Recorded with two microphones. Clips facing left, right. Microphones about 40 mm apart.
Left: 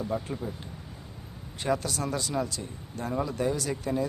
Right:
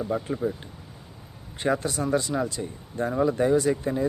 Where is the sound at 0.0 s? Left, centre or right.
Centre.